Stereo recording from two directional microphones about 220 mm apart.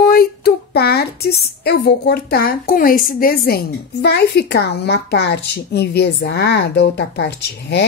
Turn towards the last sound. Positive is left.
turn(degrees=50)  # may be behind; listen again after turning